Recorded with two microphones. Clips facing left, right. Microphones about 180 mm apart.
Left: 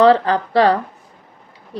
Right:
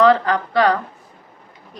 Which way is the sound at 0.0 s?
30° left (ahead or behind).